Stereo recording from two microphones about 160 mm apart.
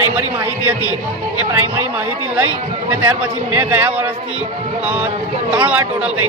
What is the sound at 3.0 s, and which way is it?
A man's voice, 10° right (ahead or behind).